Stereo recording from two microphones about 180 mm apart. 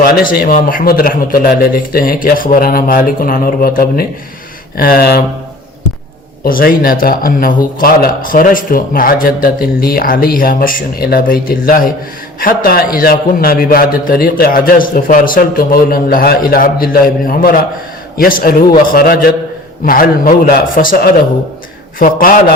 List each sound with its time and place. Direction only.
0.0 s a man's voice: 55° left (ahead or behind)
6.4 s a man's voice: 55° left (ahead or behind)